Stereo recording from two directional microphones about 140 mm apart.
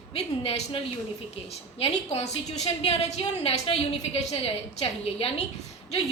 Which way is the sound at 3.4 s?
45° left (ahead or behind).